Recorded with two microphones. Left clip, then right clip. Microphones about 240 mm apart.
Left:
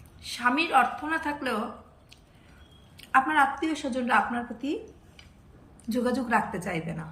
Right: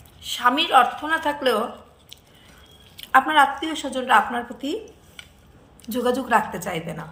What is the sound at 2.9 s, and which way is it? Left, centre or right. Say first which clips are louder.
A woman's voice: right 6 dB; centre.